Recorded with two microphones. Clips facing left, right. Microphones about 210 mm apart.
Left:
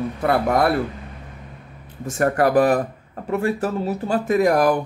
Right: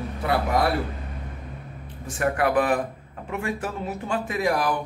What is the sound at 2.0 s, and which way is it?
Speech, 45° left (ahead or behind).